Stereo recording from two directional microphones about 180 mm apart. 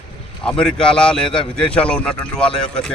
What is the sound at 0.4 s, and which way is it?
A man's voice, 5° left (ahead or behind).